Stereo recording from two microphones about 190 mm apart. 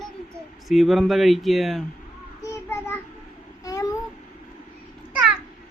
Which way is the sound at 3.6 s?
15° left (ahead or behind).